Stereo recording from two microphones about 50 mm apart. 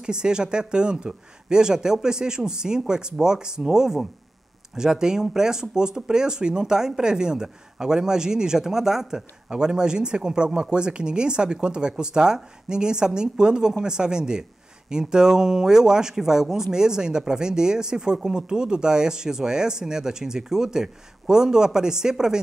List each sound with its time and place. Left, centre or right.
0.0 s speech: centre